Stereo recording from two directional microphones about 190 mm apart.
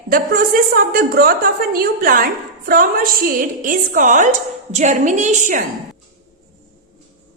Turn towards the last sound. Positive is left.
turn(degrees=-40)  # may be behind; listen again after turning